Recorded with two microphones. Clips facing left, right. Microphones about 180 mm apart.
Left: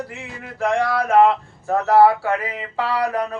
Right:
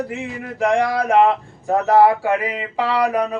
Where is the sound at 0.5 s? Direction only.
15° right (ahead or behind).